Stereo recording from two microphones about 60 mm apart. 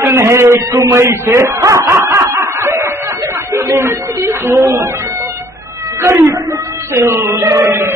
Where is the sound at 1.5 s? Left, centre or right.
Right.